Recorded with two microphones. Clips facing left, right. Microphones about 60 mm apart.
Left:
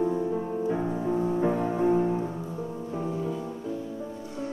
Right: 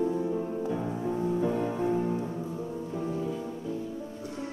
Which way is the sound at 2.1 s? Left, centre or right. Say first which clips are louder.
Left 2 dB; centre.